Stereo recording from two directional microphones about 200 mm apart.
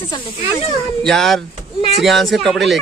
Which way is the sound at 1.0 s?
Centre (ahead or behind).